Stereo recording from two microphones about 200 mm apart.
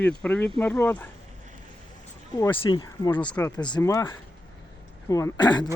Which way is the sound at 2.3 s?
15° left (ahead or behind).